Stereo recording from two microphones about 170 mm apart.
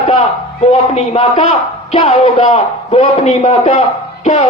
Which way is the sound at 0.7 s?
35° left (ahead or behind).